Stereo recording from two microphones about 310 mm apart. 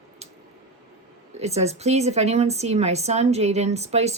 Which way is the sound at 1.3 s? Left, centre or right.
Right.